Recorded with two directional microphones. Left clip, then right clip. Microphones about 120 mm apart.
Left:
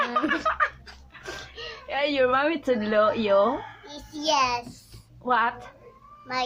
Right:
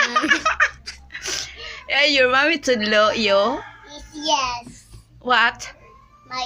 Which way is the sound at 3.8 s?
30° left (ahead or behind).